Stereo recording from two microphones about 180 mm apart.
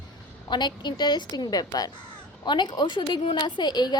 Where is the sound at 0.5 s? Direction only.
25° left (ahead or behind).